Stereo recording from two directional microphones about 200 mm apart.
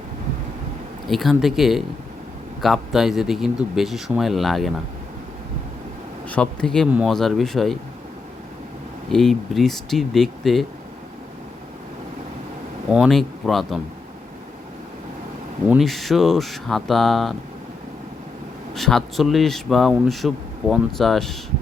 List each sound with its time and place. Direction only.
1.0 s a man's voice: centre (ahead or behind)
6.2 s a man's voice: 5° left (ahead or behind)
9.1 s a man's voice: centre (ahead or behind)
12.9 s a man's voice: centre (ahead or behind)
15.7 s a man's voice: centre (ahead or behind)
18.7 s a man's voice: centre (ahead or behind)